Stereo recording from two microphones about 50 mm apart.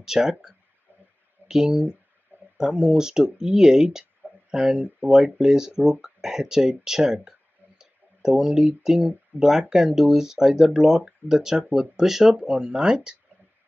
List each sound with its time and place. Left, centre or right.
0.0 s speech: centre
4.7 s speech: centre